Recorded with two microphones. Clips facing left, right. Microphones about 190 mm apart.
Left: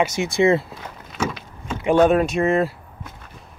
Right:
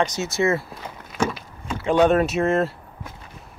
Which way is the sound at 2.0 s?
Centre (ahead or behind).